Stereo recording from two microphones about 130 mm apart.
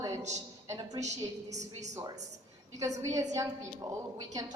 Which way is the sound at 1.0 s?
60° right (ahead or behind).